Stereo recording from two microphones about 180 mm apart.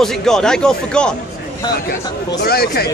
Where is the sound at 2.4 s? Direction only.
60° left (ahead or behind).